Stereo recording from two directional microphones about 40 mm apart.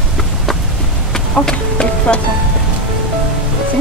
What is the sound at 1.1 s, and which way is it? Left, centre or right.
Music, centre.